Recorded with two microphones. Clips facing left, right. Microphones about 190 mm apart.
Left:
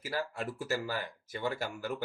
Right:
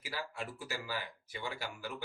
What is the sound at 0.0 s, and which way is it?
Speech, 45° left (ahead or behind).